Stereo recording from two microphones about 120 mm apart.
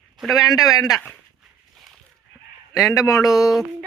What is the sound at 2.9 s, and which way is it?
Speech, 30° left (ahead or behind).